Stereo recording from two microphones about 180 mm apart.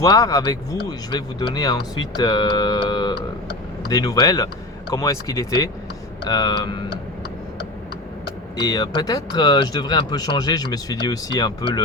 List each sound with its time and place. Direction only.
0.0 s speech: 20° left (ahead or behind)
8.5 s speech: 25° left (ahead or behind)